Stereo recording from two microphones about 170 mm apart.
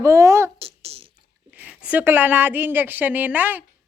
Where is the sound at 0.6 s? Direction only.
35° right (ahead or behind).